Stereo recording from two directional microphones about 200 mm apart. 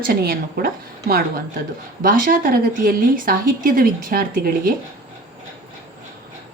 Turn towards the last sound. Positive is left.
turn(degrees=-45)  # may be behind; listen again after turning